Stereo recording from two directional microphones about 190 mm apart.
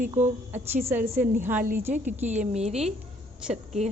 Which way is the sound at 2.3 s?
35° right (ahead or behind).